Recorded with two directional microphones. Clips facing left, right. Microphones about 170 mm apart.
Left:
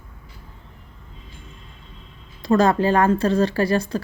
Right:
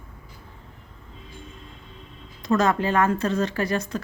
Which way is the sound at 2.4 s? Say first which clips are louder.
Left 4 dB; 35° left (ahead or behind).